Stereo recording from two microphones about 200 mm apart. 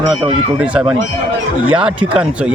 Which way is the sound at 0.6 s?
5° right (ahead or behind).